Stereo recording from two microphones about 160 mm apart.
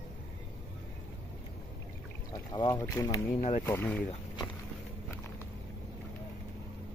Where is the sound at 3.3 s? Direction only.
45° left (ahead or behind).